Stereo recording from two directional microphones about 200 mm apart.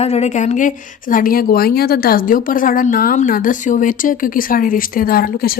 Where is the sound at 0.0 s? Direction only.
35° left (ahead or behind).